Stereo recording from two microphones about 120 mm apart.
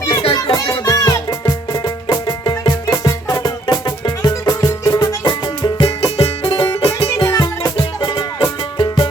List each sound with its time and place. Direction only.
0.2 s music: 45° left (ahead or behind)
0.5 s music: 30° left (ahead or behind)
6.0 s music: 55° left (ahead or behind)
6.4 s music: 40° left (ahead or behind)
7.2 s music: 35° left (ahead or behind)